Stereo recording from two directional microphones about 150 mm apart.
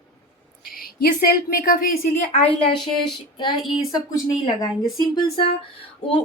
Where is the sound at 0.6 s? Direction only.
80° left.